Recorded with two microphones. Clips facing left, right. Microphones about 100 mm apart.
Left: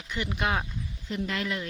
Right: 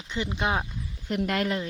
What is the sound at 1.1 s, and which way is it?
Speech, 55° right (ahead or behind).